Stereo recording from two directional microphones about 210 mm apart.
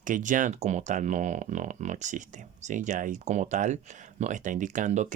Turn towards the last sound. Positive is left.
turn(degrees=-35)  # may be behind; listen again after turning